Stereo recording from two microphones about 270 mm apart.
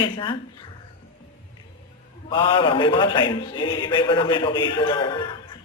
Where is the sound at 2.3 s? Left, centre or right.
Centre.